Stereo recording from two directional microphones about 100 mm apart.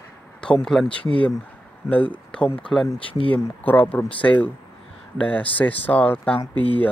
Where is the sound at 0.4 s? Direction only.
5° left (ahead or behind).